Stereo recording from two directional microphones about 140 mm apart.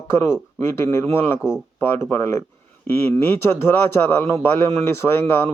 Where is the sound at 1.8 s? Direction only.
20° left (ahead or behind).